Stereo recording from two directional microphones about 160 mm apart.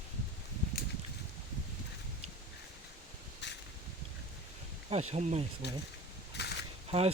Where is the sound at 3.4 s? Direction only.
90° left.